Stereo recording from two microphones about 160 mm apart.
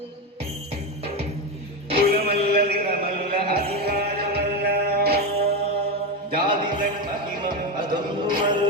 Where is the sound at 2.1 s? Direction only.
75° right (ahead or behind).